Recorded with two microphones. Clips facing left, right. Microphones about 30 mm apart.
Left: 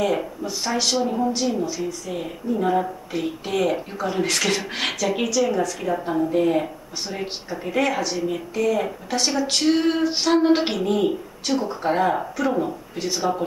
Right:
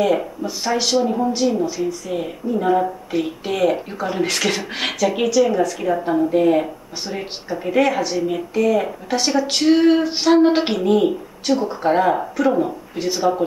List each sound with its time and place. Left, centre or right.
0.0 s speech: centre